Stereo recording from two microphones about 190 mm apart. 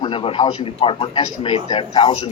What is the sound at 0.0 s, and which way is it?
Speech, 30° left (ahead or behind).